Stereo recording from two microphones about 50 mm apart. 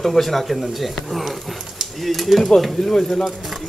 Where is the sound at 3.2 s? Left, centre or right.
Centre.